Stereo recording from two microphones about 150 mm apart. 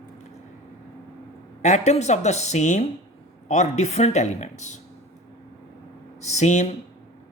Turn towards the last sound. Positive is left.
turn(degrees=50)  # may be behind; listen again after turning